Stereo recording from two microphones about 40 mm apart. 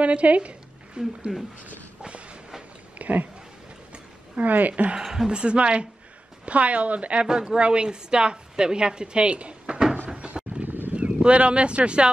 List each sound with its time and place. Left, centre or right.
0.0 s a woman's voice: right
2.0 s train: right
3.0 s a sound: right
4.4 s speech: right
5.0 s a woman's voice: centre
5.3 s a woman's voice: right
7.2 s a woman's voice: right
10.0 s door: right
10.6 s a sound: right
11.0 s speech: right